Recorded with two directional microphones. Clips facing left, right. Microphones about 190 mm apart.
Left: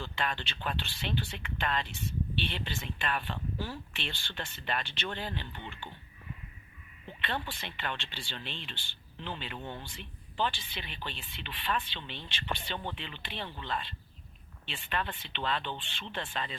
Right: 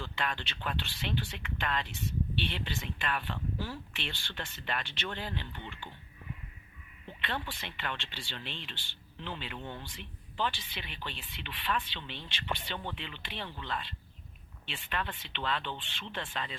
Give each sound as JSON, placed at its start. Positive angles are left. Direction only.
{"t": 0.0, "sound": "speech", "side_deg": 30}
{"t": 7.2, "sound": "speech", "side_deg": 30}